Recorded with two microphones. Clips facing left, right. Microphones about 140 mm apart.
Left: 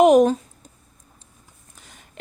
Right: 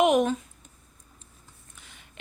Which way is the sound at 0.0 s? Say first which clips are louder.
Left 8 dB; 40° left (ahead or behind).